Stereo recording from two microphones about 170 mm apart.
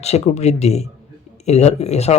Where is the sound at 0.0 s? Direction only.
40° left (ahead or behind).